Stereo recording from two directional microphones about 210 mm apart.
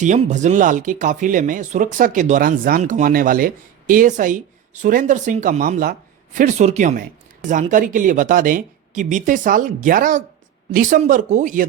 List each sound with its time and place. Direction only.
0.0 s speech: 35° right (ahead or behind)